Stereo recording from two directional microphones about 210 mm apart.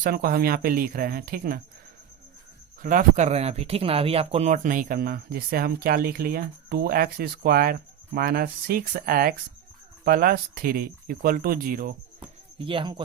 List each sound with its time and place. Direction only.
0.0 s speech: 45° right (ahead or behind)
2.8 s speech: 40° right (ahead or behind)
12.5 s speech: 25° right (ahead or behind)